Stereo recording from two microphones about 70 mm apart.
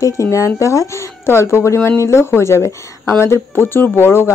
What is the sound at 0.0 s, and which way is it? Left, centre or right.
Speech, left.